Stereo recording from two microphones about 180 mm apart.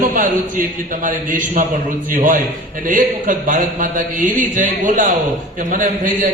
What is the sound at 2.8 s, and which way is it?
A man's voice, 50° right (ahead or behind).